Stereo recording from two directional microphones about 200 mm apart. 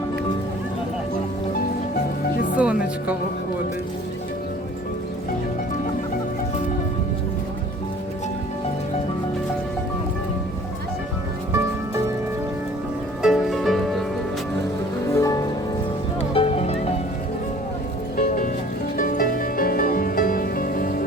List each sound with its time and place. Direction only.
2.6 s speech: 5° right (ahead or behind)
13.2 s music: centre (ahead or behind)
15.1 s music: 15° left (ahead or behind)
16.3 s music: 30° left (ahead or behind)
18.2 s music: 45° left (ahead or behind)